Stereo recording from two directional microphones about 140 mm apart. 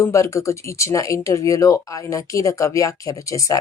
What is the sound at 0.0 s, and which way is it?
Speech, 20° left (ahead or behind).